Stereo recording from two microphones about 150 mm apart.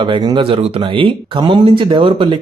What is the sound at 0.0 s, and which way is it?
Speech, 30° right (ahead or behind).